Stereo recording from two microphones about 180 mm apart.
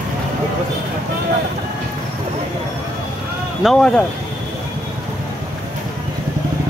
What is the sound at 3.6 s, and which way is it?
Speech, 5° left (ahead or behind).